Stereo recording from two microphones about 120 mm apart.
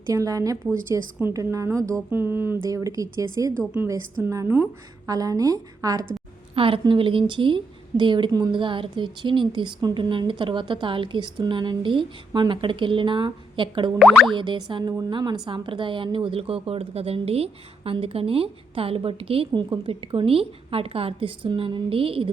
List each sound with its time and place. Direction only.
0.1 s speech: 30° right (ahead or behind)
2.6 s a woman's voice: 30° right (ahead or behind)
6.5 s a woman's voice: 50° right (ahead or behind); by 8.6 s 30° right (ahead or behind)
8.6 s a woman's voice: 45° right (ahead or behind)
14.0 s speech: 5° right (ahead or behind)
14.3 s a woman's voice: 40° right (ahead or behind)